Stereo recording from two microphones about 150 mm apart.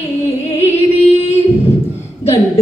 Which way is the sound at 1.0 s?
45° left (ahead or behind).